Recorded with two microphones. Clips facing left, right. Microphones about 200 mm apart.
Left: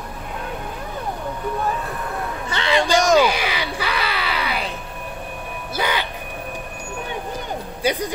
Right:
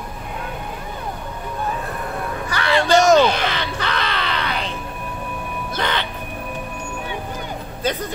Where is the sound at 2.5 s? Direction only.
20° left (ahead or behind).